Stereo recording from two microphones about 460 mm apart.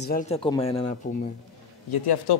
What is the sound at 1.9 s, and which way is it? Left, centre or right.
Speech, left.